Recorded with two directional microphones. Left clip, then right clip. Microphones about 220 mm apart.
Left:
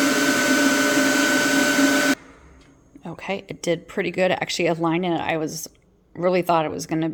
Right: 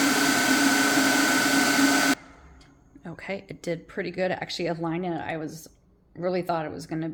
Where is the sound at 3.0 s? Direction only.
20° left (ahead or behind).